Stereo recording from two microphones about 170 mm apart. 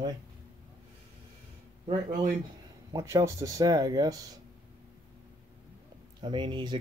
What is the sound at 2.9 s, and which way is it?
Speech, 20° right (ahead or behind).